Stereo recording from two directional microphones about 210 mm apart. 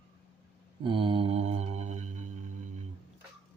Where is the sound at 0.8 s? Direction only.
25° right (ahead or behind).